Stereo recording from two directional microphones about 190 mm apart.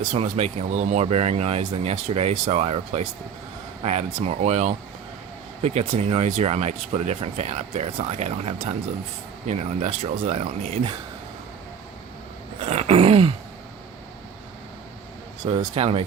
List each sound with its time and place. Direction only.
0.0 s speech: 35° right (ahead or behind)
12.5 s groan: 35° right (ahead or behind)
15.4 s speech: 30° right (ahead or behind)